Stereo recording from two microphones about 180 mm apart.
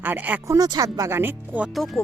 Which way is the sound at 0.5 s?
20° right (ahead or behind).